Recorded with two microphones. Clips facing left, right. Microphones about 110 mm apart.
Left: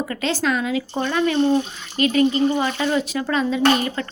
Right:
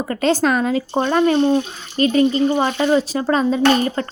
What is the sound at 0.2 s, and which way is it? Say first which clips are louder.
A woman's voice: right 7 dB; 45° right (ahead or behind).